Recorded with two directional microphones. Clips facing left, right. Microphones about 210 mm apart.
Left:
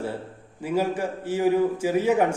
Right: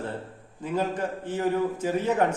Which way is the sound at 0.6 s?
10° left (ahead or behind).